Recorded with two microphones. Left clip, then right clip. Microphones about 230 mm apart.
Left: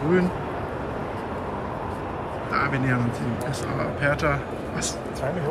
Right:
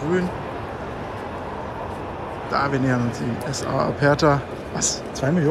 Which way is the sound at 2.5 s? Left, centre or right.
Centre.